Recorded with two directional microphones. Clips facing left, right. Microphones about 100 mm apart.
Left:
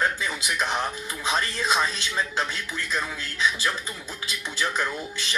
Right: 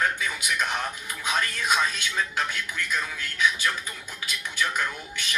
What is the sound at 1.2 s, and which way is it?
Speech, 30° left (ahead or behind).